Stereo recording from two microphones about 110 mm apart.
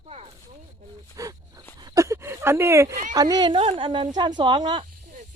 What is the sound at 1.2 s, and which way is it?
Speech, 30° right (ahead or behind).